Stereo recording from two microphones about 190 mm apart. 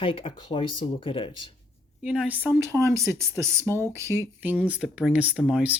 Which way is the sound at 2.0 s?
5° right (ahead or behind).